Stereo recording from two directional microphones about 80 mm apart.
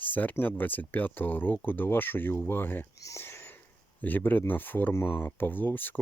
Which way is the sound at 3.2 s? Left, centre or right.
Left.